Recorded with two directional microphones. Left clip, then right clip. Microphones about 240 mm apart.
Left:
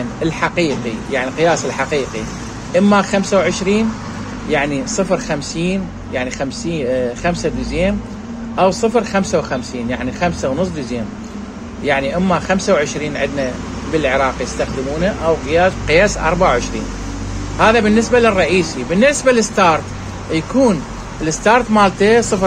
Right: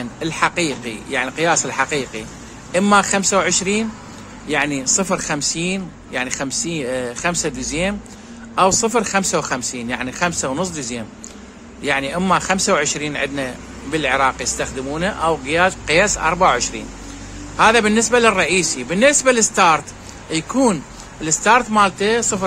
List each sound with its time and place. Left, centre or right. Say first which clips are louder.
0.2 s speech: left 1 dB; centre